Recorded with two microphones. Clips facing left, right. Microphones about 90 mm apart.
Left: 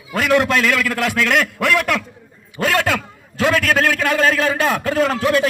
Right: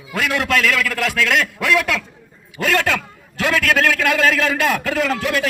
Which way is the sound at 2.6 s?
15° left (ahead or behind).